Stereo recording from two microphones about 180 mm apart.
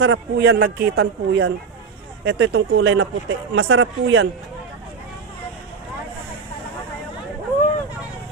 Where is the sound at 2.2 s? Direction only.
85° right.